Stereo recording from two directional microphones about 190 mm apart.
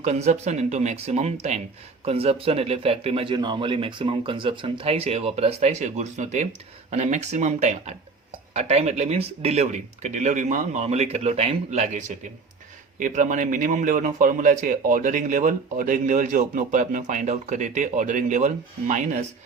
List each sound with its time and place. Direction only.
0.0 s a man's voice: 35° right (ahead or behind)